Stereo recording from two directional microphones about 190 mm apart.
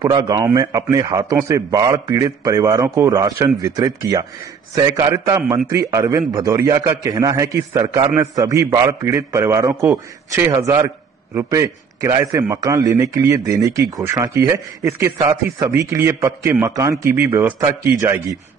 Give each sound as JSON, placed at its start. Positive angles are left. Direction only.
{"t": 0.0, "sound": "a man's voice", "side_deg": -20}